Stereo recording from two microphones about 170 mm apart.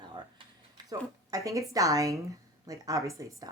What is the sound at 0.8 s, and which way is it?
Speech, 20° right (ahead or behind).